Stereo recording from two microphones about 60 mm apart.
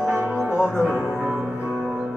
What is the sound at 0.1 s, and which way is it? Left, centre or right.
Music, right.